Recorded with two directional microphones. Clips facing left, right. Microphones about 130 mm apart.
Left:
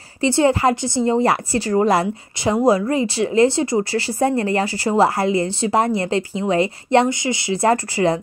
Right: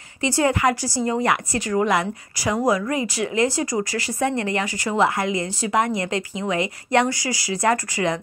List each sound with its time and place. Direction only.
0.2 s a woman's voice: 30° left (ahead or behind)